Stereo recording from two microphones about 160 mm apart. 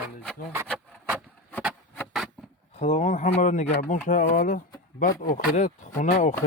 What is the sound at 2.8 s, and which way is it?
Speech, 45° left (ahead or behind).